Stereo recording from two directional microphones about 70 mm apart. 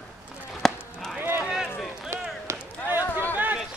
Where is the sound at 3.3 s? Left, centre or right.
Right.